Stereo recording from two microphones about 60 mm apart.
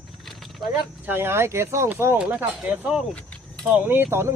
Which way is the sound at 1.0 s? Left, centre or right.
Right.